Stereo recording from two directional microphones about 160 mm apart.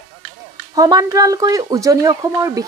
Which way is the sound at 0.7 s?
25° right (ahead or behind).